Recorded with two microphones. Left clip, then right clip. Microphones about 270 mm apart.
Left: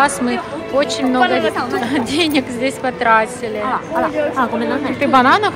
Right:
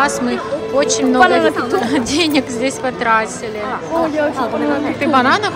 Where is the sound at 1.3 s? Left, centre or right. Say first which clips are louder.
Right 3 dB; right.